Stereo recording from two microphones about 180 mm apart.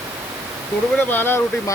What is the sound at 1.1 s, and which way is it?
Speech, 10° left (ahead or behind).